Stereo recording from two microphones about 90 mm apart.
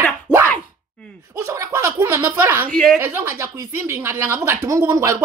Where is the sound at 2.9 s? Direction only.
25° right (ahead or behind).